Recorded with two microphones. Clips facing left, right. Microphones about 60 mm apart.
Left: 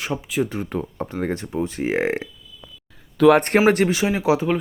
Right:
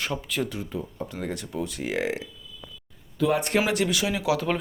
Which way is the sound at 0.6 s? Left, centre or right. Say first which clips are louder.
Left 6 dB; left.